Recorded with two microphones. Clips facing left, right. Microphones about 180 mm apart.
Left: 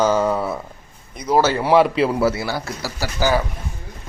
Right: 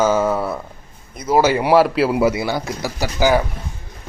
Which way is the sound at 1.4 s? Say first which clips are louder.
Right 2 dB; 15° right (ahead or behind).